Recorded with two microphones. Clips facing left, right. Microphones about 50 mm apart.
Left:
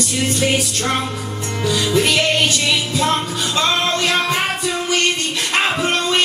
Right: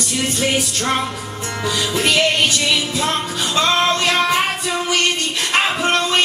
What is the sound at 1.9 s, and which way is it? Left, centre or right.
Music, centre.